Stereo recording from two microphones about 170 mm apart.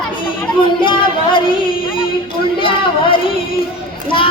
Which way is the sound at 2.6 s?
30° left (ahead or behind).